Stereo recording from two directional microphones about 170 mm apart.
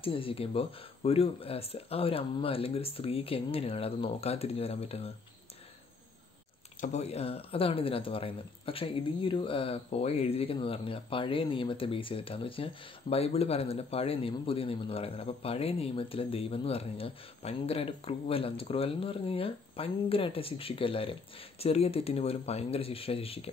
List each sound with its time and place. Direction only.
0.0 s speech: 35° left (ahead or behind)
6.8 s speech: 40° left (ahead or behind)